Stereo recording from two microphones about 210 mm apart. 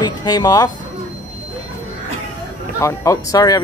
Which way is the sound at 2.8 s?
15° left (ahead or behind).